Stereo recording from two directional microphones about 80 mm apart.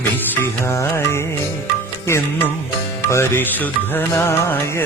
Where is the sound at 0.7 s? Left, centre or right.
Left.